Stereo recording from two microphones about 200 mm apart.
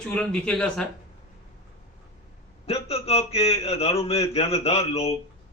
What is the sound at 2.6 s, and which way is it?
A man's voice, 30° left (ahead or behind).